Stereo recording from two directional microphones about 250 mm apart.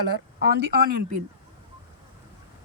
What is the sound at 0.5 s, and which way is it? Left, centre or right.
Speech, right.